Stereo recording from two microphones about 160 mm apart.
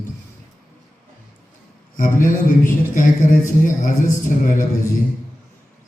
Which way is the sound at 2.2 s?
55° left (ahead or behind).